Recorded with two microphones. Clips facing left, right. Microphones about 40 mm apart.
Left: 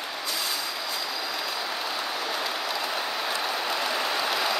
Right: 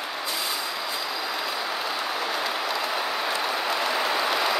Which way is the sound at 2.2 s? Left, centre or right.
Centre.